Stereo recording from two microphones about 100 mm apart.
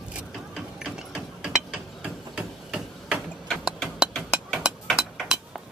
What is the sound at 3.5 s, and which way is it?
Tick-tock, centre (ahead or behind).